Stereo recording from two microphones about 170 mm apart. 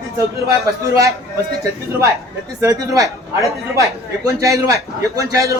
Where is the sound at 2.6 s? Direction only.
20° right (ahead or behind).